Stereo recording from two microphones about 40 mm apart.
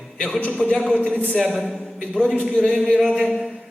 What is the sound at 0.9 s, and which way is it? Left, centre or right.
Speech, left.